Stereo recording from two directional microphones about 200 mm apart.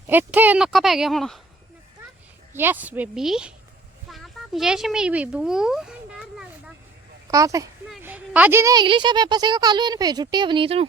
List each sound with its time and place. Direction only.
0.1 s speech: 10° right (ahead or behind)
2.5 s a woman's voice: 10° right (ahead or behind)
7.3 s speech: 15° right (ahead or behind)